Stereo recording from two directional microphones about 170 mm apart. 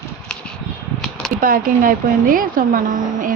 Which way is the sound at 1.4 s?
55° right (ahead or behind).